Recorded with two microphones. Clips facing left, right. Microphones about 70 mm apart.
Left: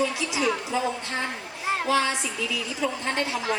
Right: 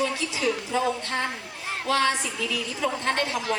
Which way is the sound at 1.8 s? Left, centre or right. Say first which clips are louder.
Right 3 dB; centre.